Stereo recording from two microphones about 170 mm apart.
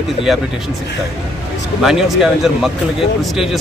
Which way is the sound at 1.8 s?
Centre (ahead or behind).